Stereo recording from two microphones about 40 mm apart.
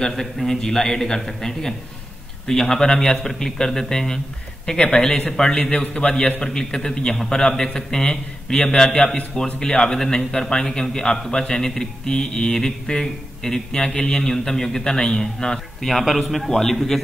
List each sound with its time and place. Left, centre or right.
0.5 s a man's voice: centre
6.4 s a man's voice: centre
15.9 s a man's voice: centre